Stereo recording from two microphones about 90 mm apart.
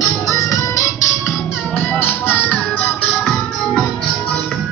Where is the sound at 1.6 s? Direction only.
20° left (ahead or behind).